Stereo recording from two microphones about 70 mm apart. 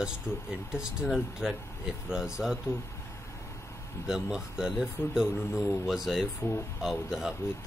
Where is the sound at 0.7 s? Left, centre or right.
Centre.